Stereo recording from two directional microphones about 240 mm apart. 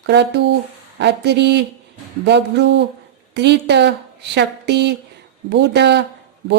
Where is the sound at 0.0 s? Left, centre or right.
Right.